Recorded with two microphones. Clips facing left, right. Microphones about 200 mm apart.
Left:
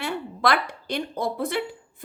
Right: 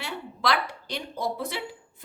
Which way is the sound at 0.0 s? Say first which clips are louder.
Left 5 dB; 55° left (ahead or behind).